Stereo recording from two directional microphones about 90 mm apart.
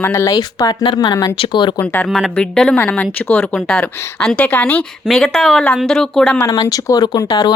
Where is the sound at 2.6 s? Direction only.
20° left (ahead or behind).